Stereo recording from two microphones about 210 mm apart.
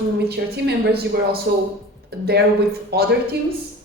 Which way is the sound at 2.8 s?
50° right (ahead or behind).